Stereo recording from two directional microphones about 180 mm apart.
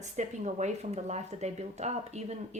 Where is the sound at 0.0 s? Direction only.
40° right (ahead or behind).